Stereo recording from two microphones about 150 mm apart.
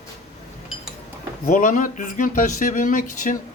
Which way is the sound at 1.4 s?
60° left (ahead or behind).